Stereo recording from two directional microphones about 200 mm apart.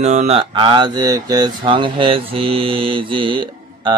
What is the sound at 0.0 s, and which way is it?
Speech, 35° right (ahead or behind).